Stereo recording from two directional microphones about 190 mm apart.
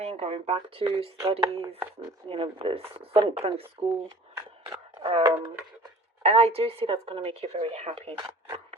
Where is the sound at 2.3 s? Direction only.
30° right (ahead or behind).